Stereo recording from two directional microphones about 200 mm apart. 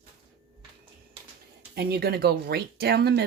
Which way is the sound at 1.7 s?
55° right (ahead or behind).